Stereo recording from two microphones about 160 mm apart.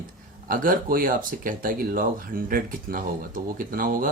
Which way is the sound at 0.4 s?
60° right (ahead or behind).